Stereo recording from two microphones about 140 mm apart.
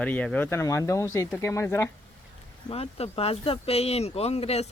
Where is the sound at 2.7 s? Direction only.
45° left (ahead or behind).